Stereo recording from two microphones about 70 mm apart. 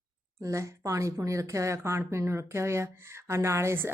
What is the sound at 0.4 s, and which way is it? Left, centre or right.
Speech, right.